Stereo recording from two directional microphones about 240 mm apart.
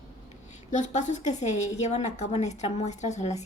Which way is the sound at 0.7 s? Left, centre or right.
Left.